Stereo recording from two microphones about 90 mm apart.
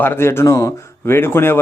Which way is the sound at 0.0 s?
25° left (ahead or behind).